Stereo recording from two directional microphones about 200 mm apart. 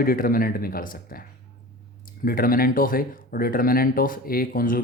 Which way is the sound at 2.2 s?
45° left (ahead or behind).